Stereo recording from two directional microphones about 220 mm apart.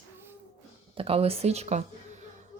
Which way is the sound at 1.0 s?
25° right (ahead or behind).